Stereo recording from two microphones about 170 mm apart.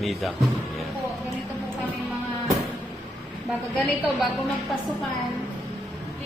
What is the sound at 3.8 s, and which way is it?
Speech, centre (ahead or behind).